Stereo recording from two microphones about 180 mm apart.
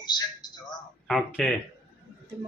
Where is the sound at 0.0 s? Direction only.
25° left (ahead or behind).